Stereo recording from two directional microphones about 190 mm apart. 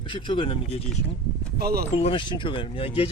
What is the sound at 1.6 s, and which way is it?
Speech, 55° right (ahead or behind).